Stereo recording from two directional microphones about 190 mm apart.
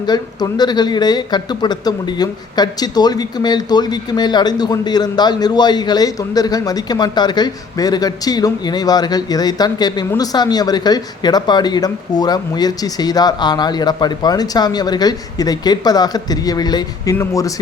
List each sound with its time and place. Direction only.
0.0 s speech: 20° left (ahead or behind)